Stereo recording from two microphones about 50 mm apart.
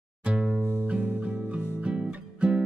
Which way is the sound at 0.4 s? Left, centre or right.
Centre.